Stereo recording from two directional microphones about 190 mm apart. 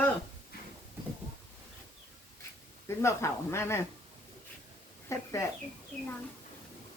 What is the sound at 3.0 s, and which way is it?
Speech, 15° left (ahead or behind).